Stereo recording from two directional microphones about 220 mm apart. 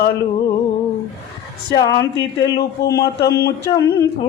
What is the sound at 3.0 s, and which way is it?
Mantra, 45° left (ahead or behind).